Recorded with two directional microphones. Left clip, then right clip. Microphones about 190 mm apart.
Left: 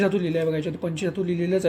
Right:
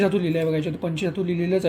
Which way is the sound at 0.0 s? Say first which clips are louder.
Right 1 dB; centre (ahead or behind).